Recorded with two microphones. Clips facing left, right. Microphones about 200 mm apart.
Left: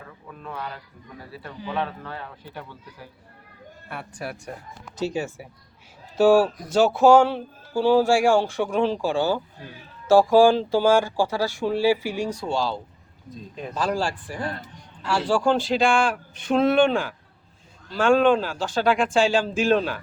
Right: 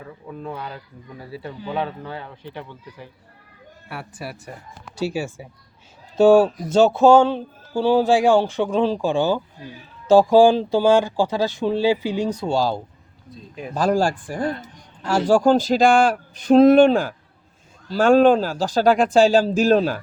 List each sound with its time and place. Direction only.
0.4 s speech: 25° right (ahead or behind)
2.1 s speech: 5° left (ahead or behind)
3.8 s speech: 5° right (ahead or behind)
6.1 s speech: 20° right (ahead or behind)
12.5 s speech: 40° right (ahead or behind)